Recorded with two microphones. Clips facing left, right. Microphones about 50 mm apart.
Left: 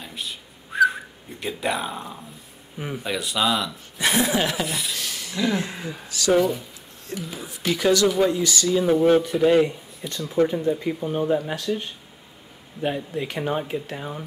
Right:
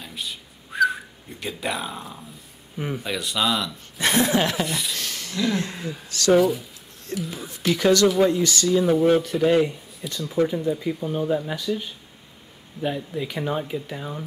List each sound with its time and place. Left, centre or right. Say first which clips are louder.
0.0 s whistling: even; centre
2.8 s speech: even; centre
6.3 s speech: right 2 dB; centre
8.4 s speech: right 1 dB; centre
8.6 s speech: even; centre
12.8 s speech: left 1 dB; centre